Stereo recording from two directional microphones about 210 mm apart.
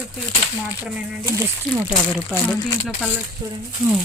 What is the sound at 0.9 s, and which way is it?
Speech, 10° right (ahead or behind).